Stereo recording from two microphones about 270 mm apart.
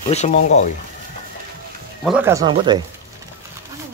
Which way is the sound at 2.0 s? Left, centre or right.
Centre.